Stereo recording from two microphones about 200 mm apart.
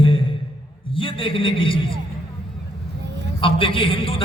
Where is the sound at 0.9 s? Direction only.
25° left (ahead or behind).